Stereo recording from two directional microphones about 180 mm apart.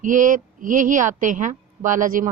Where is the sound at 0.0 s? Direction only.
45° right (ahead or behind).